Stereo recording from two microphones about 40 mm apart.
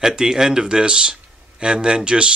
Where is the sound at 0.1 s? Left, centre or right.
Centre.